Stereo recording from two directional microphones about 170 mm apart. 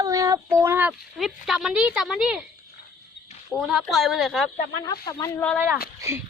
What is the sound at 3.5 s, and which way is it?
Speech, centre (ahead or behind).